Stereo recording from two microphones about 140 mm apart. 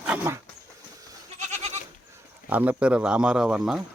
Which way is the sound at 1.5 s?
55° right (ahead or behind).